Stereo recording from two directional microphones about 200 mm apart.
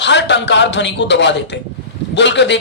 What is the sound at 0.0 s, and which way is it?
A woman's voice, 60° left (ahead or behind).